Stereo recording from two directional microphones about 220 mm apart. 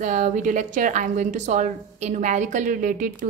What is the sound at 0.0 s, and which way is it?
A woman's voice, 35° right (ahead or behind).